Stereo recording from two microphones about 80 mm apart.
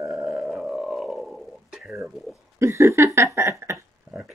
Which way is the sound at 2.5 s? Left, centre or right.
Right.